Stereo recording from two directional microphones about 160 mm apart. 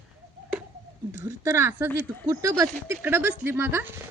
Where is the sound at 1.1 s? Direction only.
15° right (ahead or behind).